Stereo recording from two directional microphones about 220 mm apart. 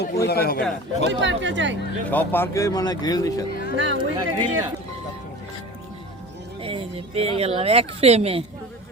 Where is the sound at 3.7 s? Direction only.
55° right (ahead or behind).